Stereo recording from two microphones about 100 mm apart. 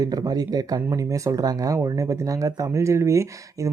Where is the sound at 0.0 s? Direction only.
40° right (ahead or behind).